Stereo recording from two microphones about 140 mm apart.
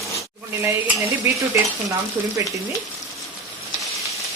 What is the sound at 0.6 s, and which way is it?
Stir, 20° right (ahead or behind).